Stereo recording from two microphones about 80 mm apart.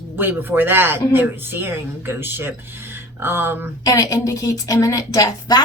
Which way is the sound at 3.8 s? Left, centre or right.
Left.